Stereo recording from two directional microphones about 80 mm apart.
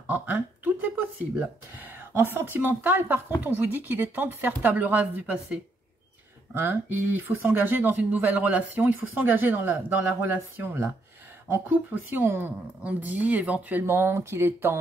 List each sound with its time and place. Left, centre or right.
0.0 s speech: right
1.8 s a sound: right
2.5 s speech: right
13.8 s speech: right